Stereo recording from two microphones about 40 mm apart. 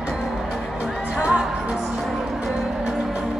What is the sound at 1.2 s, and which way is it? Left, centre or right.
Music, right.